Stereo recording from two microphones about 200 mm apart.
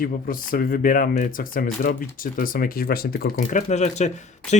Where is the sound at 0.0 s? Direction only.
45° left (ahead or behind).